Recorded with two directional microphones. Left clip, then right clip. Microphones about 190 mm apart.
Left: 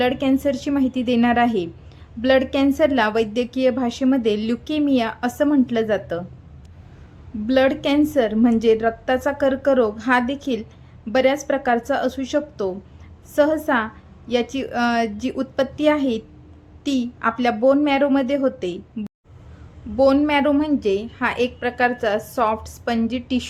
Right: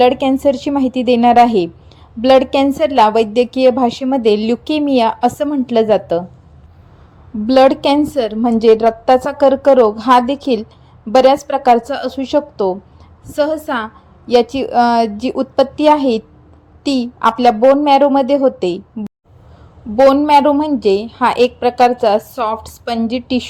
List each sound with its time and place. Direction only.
0.0 s a woman's voice: 20° right (ahead or behind)
7.4 s a woman's voice: 20° right (ahead or behind)
20.0 s a woman's voice: 20° right (ahead or behind)